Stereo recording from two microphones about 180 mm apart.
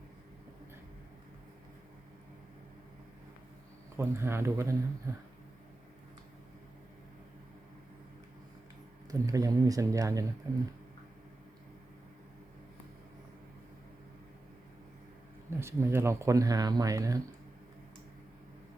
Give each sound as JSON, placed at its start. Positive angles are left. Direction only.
{"t": 3.9, "sound": "speech", "side_deg": -15}
{"t": 9.0, "sound": "speech", "side_deg": -20}
{"t": 15.4, "sound": "speech", "side_deg": -15}